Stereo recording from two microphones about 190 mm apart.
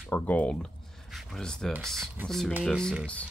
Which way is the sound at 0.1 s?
10° left (ahead or behind).